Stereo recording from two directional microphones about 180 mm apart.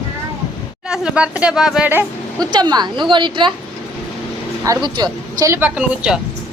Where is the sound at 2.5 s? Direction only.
25° right (ahead or behind).